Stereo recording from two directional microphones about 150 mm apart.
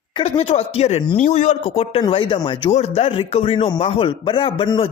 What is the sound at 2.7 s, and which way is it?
A man's voice, 45° left (ahead or behind).